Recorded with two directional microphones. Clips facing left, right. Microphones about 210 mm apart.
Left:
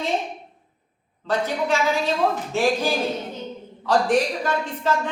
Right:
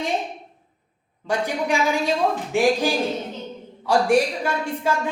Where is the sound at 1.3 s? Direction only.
15° right (ahead or behind).